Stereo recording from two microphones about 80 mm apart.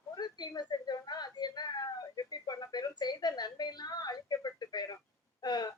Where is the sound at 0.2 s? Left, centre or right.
Left.